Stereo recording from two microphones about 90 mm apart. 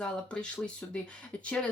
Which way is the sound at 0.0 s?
10° left (ahead or behind).